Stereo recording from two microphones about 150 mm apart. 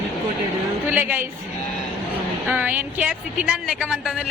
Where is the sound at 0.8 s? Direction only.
15° right (ahead or behind).